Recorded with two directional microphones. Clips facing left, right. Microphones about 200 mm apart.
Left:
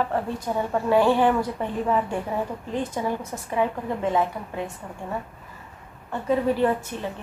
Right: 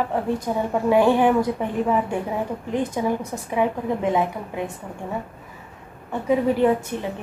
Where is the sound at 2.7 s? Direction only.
15° right (ahead or behind).